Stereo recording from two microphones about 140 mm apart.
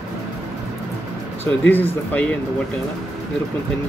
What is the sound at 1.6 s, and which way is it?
Speech, 15° left (ahead or behind).